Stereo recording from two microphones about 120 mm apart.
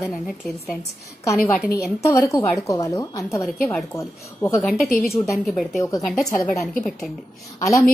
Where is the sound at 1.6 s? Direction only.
5° right (ahead or behind).